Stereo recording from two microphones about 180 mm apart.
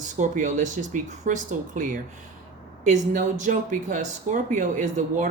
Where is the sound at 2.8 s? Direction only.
45° right (ahead or behind).